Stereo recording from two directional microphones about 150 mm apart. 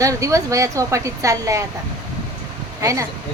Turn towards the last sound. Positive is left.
turn(degrees=-20)  # may be behind; listen again after turning